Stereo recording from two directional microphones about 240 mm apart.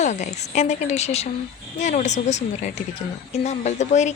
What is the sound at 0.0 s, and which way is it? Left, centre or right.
A woman's voice, left.